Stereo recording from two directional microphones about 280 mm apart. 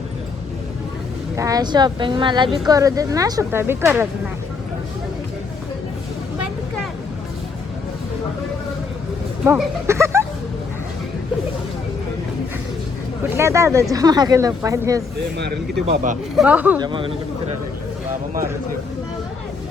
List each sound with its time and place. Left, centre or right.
1.4 s speech: centre
9.4 s speech: centre
13.3 s speech: centre
16.4 s speech: centre